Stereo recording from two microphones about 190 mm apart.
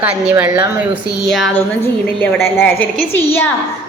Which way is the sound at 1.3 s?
Centre (ahead or behind).